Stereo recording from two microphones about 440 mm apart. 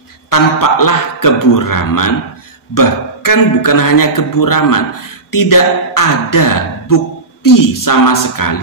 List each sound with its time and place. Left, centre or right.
0.3 s speech: left